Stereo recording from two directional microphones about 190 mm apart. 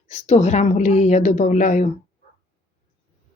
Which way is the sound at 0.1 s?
40° left (ahead or behind).